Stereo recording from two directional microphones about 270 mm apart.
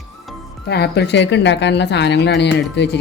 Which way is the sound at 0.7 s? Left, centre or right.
Left.